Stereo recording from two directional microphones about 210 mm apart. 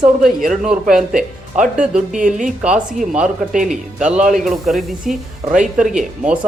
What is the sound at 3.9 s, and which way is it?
Speech, 5° right (ahead or behind).